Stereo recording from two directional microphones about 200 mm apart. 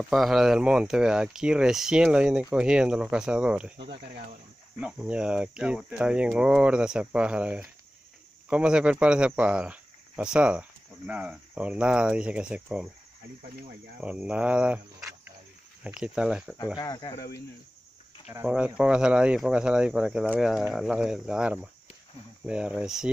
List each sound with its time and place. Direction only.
0.1 s speech: centre (ahead or behind)
3.8 s speech: 55° right (ahead or behind)
4.7 s speech: 5° right (ahead or behind)
14.0 s speech: 5° right (ahead or behind)
15.8 s speech: 5° right (ahead or behind)
16.7 s speech: 20° left (ahead or behind)
18.5 s speech: 5° right (ahead or behind)